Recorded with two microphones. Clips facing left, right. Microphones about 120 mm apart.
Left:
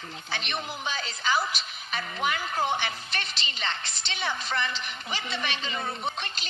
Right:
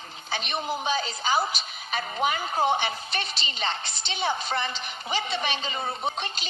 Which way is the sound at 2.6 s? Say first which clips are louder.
Right 5 dB; 15° right (ahead or behind).